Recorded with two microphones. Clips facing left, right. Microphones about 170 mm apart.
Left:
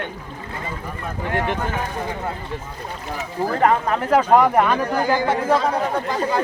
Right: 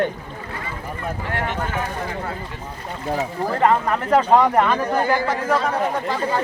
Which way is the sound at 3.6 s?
5° left (ahead or behind).